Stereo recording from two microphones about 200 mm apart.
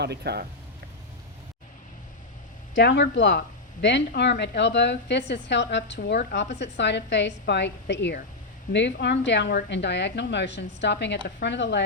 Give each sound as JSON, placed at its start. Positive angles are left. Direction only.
{"t": 0.0, "sound": "speech", "side_deg": -55}
{"t": 2.7, "sound": "speech", "side_deg": 60}